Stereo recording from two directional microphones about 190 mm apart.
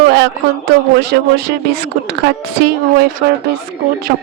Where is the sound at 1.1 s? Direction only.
60° right (ahead or behind).